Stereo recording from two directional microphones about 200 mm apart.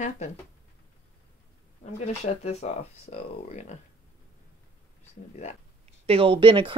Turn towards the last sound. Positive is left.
turn(degrees=-25)  # may be behind; listen again after turning